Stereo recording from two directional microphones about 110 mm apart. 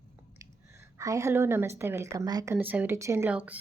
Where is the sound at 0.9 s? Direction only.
30° right (ahead or behind).